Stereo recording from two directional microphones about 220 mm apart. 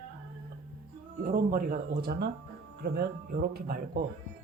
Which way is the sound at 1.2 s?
40° right (ahead or behind).